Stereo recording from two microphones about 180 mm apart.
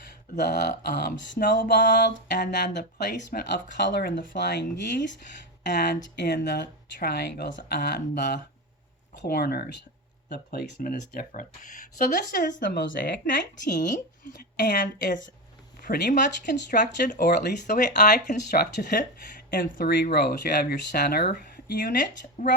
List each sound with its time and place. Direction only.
0.3 s speech: 65° left (ahead or behind); by 12.8 s 50° left (ahead or behind)
14.3 s speech: 55° left (ahead or behind)
16.5 s speech: 70° left (ahead or behind)
17.1 s speech: 55° left (ahead or behind)
19.5 s speech: 50° left (ahead or behind)
21.5 s a sound: 50° left (ahead or behind)
22.4 s speech: 45° left (ahead or behind)